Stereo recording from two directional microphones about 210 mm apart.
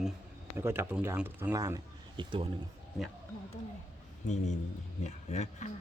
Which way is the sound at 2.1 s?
25° right (ahead or behind).